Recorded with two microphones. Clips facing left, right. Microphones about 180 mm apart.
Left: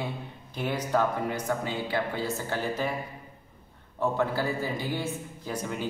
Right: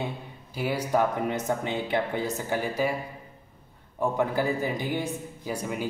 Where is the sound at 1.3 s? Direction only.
20° right (ahead or behind).